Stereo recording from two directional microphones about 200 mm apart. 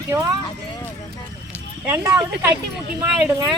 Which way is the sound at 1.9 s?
10° right (ahead or behind).